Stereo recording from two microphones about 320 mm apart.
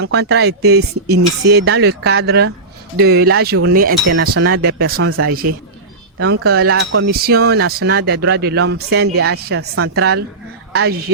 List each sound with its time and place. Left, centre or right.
0.0 s speech: right
4.3 s speech: right
4.5 s speech: right
4.9 s speech: right
5.3 s speech: right
6.1 s a woman's voice: right